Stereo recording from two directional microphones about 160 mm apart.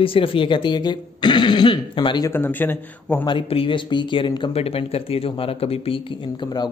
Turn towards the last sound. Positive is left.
turn(degrees=30)  # may be behind; listen again after turning